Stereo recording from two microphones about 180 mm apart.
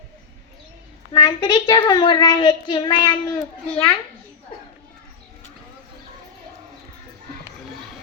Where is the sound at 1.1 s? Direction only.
25° left (ahead or behind).